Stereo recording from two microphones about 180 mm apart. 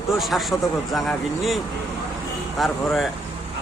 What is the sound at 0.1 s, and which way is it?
A man's voice, centre (ahead or behind).